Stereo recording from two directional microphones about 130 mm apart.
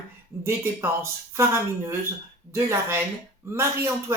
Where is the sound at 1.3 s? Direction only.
20° right (ahead or behind).